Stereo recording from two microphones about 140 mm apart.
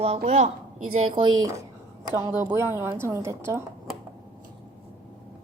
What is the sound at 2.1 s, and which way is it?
A woman's voice, 20° right (ahead or behind).